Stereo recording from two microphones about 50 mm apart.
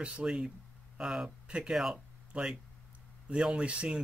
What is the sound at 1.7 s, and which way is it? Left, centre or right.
Speech, centre.